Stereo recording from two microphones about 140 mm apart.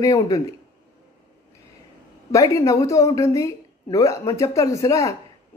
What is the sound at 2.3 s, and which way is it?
Speech, 20° left (ahead or behind).